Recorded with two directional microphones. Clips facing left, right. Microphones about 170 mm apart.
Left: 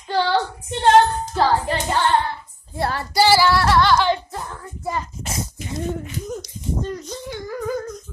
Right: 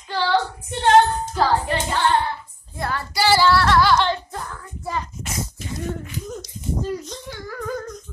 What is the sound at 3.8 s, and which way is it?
Music, centre (ahead or behind).